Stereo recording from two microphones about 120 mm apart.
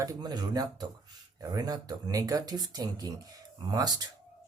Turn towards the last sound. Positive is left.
turn(degrees=-35)  # may be behind; listen again after turning